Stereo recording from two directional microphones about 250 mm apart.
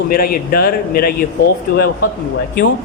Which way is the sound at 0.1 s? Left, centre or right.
Left.